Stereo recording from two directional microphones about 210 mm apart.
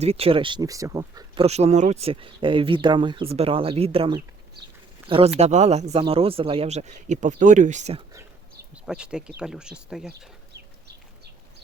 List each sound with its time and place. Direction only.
0.0 s speech: 30° right (ahead or behind)
1.5 s speech: 30° right (ahead or behind)
8.7 s speech: 5° right (ahead or behind)
10.1 s chicken: 50° right (ahead or behind)